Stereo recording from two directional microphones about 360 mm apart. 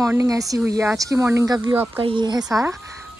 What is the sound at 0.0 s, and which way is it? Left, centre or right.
Speech, centre.